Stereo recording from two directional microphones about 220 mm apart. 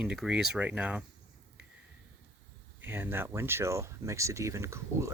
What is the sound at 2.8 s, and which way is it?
Speech, 10° right (ahead or behind).